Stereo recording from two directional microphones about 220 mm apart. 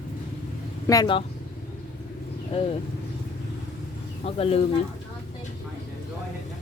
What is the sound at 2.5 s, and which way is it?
Speech, 25° left (ahead or behind).